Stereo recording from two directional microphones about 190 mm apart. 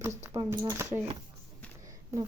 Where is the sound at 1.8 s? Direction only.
15° right (ahead or behind).